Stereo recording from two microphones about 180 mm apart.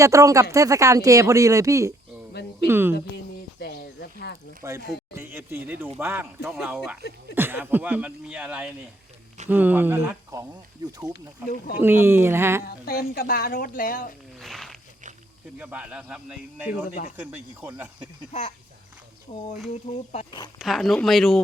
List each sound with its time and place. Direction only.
0.0 s speech: 20° right (ahead or behind)
2.3 s speech: 70° left (ahead or behind)
2.6 s speech: 10° right (ahead or behind)
3.6 s a sound: 60° left (ahead or behind)
4.6 s speech: 15° right (ahead or behind)
6.5 s speech: centre (ahead or behind)
12.6 s speech: 55° left (ahead or behind)
14.3 s a sound: centre (ahead or behind)
15.5 s speech: 5° right (ahead or behind)
18.3 s speech: 35° left (ahead or behind)
19.3 s speech: 45° left (ahead or behind)
19.9 s speech: 35° left (ahead or behind)
20.6 s speech: centre (ahead or behind)